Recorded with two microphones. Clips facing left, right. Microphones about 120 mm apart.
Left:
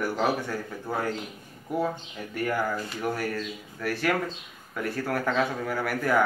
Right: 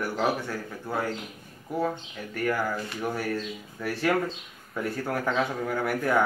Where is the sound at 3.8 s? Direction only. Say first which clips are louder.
Right 1 dB; centre (ahead or behind).